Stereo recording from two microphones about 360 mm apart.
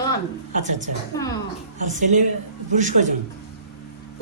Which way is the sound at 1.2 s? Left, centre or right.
Centre.